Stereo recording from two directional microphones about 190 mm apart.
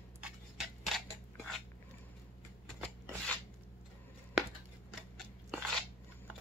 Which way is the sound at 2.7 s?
5° left (ahead or behind).